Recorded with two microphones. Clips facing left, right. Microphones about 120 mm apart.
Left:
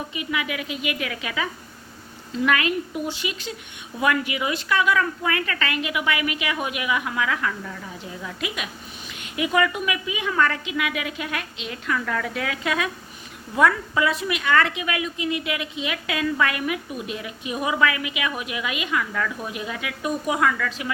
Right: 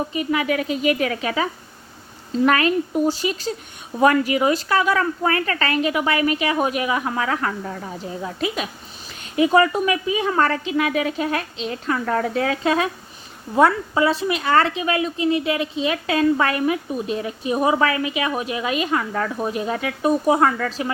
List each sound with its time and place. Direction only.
0.1 s a woman's voice: 40° right (ahead or behind)